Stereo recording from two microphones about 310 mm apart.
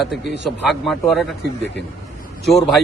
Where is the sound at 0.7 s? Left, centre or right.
Centre.